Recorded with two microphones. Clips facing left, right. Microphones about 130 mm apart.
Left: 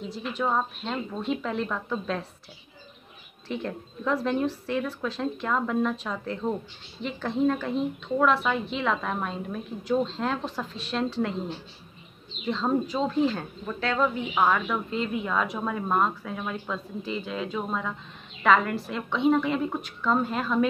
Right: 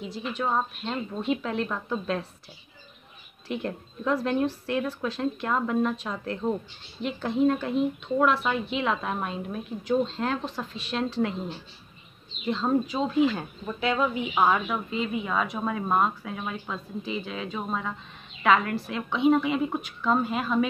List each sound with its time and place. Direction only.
0.0 s speech: centre (ahead or behind)
3.4 s speech: 5° right (ahead or behind)
12.4 s speech: 5° right (ahead or behind)